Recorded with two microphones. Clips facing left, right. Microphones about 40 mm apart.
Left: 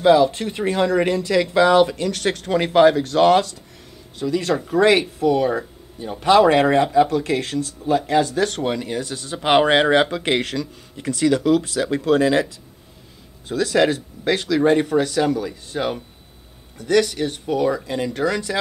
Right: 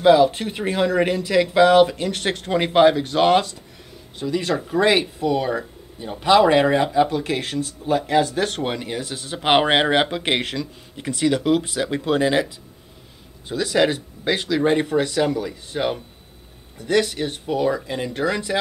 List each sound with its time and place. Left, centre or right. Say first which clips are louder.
0.0 s speech: even; centre
7.0 s speech: left 2 dB; right